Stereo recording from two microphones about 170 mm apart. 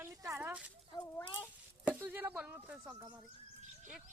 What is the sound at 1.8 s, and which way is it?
Speech, 10° right (ahead or behind).